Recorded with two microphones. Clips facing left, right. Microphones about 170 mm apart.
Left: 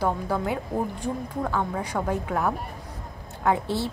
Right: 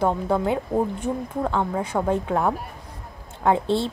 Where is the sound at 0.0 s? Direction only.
25° right (ahead or behind).